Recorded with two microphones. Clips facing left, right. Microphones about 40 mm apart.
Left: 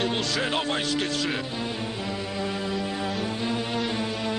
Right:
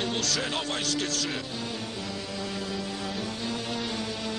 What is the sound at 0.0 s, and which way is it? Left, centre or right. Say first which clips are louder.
Music: left 3 dB; left.